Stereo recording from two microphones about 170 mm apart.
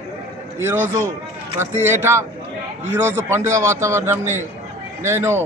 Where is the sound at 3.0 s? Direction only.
15° right (ahead or behind).